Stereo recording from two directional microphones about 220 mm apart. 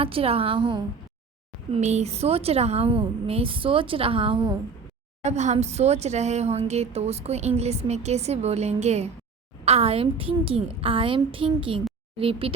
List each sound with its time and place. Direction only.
0.0 s a woman's voice: 25° right (ahead or behind)